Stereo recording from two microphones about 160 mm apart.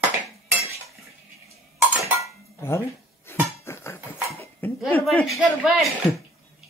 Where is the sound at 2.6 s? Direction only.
15° left (ahead or behind).